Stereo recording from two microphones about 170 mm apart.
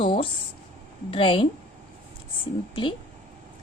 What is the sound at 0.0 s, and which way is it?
A woman's voice, 30° left (ahead or behind).